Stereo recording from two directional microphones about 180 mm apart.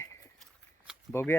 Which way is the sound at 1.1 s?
10° left (ahead or behind).